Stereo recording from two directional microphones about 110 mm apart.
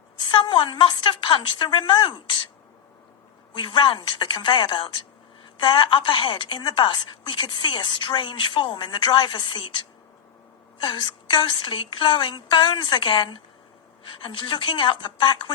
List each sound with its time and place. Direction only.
0.2 s a woman's voice: 45° left (ahead or behind)
3.5 s a woman's voice: 50° left (ahead or behind)
10.8 s a woman's voice: 50° left (ahead or behind)